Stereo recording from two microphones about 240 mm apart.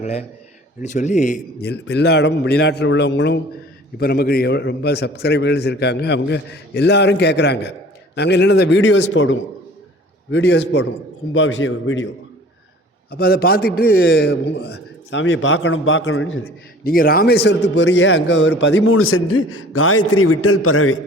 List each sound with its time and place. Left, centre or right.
0.0 s speech: left
1.6 s a man's voice: left
13.1 s a man's voice: left
16.8 s a man's voice: left